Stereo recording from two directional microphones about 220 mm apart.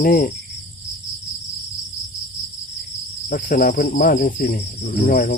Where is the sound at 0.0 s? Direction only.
40° left (ahead or behind).